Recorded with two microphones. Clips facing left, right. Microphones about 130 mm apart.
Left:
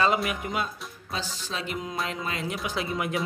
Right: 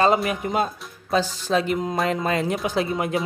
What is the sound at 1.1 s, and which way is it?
Speech, 50° right (ahead or behind).